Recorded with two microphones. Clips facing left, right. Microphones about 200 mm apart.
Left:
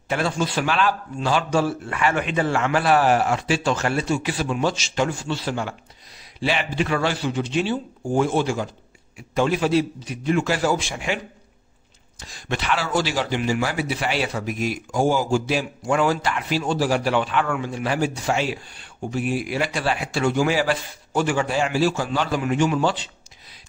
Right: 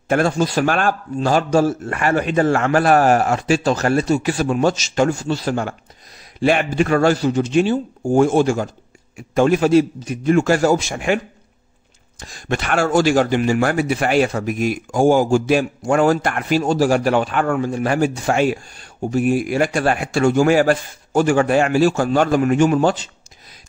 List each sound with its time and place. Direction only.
0.1 s speech: 45° right (ahead or behind)
12.2 s speech: 50° right (ahead or behind)